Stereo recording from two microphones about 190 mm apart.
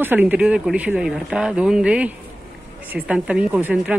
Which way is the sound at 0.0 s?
10° right (ahead or behind).